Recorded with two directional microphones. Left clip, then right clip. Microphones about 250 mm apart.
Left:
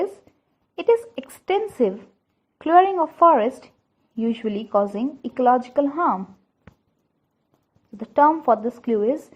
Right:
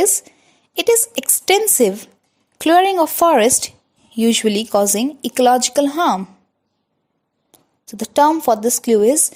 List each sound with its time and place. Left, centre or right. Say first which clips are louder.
0.8 s speech: right 4 dB; right
7.9 s speech: right 3 dB; right